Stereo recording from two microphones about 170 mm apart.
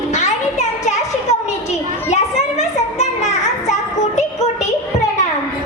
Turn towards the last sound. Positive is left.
turn(degrees=40)  # may be behind; listen again after turning